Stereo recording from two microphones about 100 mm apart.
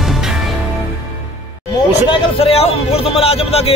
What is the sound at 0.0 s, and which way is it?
Music, 5° right (ahead or behind).